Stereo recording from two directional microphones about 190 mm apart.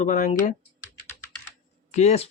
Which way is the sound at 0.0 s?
45° left (ahead or behind).